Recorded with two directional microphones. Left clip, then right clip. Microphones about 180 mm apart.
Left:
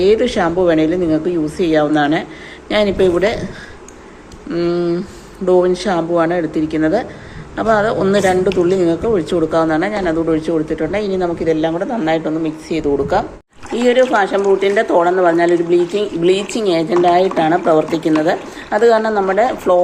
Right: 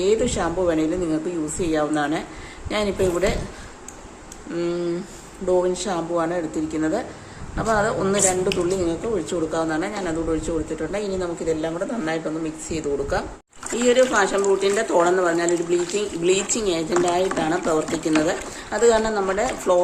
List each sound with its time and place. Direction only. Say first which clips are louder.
0.0 s speech: left 8 dB; 15° left (ahead or behind)
4.5 s speech: left 8 dB; 5° left (ahead or behind)